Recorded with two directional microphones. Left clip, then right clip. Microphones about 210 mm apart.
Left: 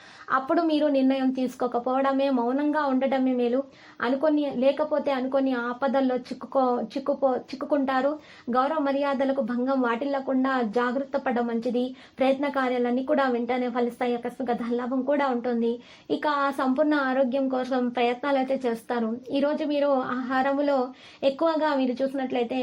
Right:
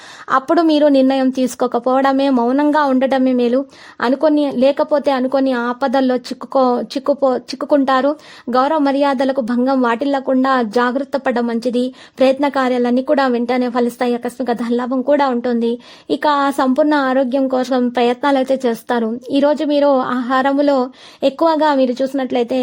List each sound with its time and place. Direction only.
0.3 s a woman's voice: 45° right (ahead or behind)